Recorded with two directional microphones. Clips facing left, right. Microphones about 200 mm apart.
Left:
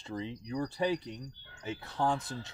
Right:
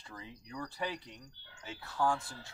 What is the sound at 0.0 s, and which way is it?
Speech, 25° left (ahead or behind).